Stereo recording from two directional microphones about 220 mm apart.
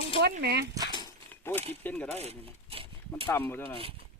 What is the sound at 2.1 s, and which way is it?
Speech, 25° right (ahead or behind).